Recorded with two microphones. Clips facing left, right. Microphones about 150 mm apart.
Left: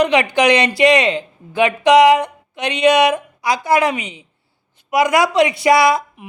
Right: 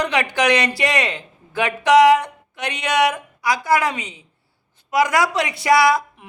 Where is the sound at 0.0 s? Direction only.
15° left (ahead or behind).